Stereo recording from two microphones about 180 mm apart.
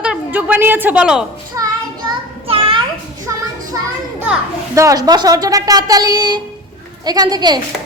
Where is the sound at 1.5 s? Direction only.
15° right (ahead or behind).